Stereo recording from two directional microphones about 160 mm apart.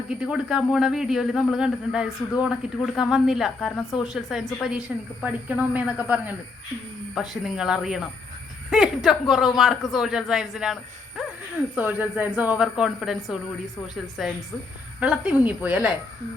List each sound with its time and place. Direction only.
0.1 s a man's voice: 5° right (ahead or behind)
11.2 s a sound: 5° right (ahead or behind)
11.7 s a man's voice: 10° right (ahead or behind)